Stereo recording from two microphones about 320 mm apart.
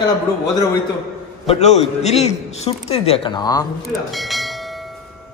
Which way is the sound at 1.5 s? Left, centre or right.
Left.